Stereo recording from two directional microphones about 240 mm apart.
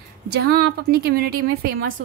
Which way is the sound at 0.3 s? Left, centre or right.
Right.